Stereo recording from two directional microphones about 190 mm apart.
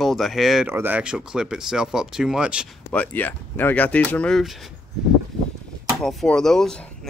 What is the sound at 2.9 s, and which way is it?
Speech, 10° left (ahead or behind).